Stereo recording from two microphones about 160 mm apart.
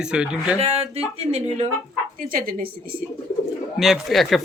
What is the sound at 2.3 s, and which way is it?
Speech, 65° right (ahead or behind).